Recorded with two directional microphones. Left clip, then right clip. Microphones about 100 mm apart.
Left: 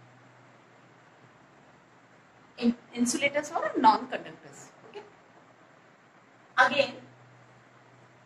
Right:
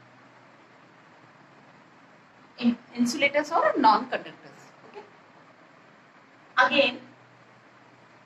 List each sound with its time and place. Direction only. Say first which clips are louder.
2.5 s a sound: right 2 dB; 30° right (ahead or behind)
3.1 s a woman's voice: right 5 dB; 30° right (ahead or behind)
6.5 s a woman's voice: right 3 dB; 30° right (ahead or behind)